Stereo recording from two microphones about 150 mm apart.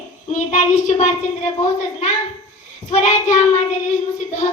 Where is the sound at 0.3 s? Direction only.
55° left (ahead or behind).